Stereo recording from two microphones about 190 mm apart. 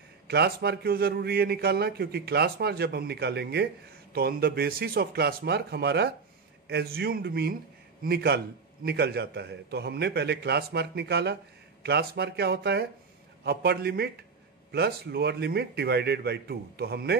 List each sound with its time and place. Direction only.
0.3 s a man's voice: 60° right (ahead or behind)